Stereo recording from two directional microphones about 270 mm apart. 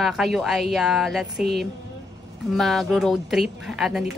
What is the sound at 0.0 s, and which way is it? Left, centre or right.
A woman's voice, centre.